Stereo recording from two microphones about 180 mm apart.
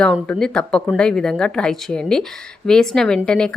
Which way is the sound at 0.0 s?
5° left (ahead or behind).